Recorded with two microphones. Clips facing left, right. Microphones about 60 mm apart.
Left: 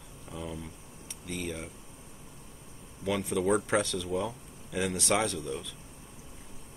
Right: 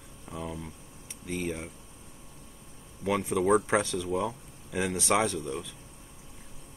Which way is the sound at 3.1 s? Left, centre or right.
Centre.